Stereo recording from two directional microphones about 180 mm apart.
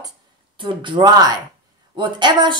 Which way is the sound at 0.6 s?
25° right (ahead or behind).